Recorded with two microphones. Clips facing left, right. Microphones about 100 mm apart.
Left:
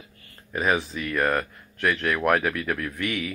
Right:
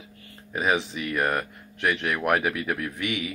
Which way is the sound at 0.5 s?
10° right (ahead or behind).